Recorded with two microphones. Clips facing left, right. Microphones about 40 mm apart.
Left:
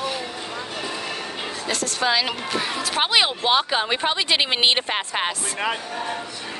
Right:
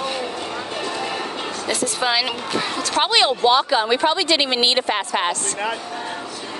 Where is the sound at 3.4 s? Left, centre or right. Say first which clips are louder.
Right 4 dB; centre.